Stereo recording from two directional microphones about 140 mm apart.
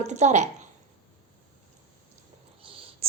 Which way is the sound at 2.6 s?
40° right (ahead or behind).